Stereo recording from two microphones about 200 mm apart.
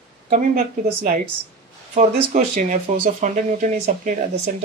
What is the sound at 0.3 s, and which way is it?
Speech, 40° right (ahead or behind).